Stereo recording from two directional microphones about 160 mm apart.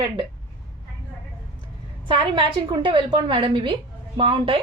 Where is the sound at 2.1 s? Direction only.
30° right (ahead or behind).